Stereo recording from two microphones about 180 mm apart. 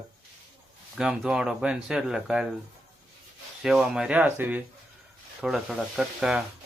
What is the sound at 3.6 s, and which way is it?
Speech, 5° right (ahead or behind).